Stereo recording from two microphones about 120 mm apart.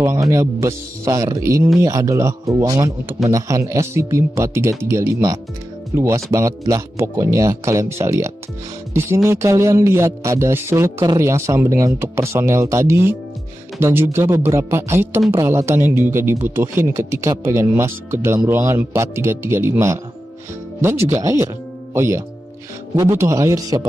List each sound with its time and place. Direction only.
0.0 s speech: 25° right (ahead or behind)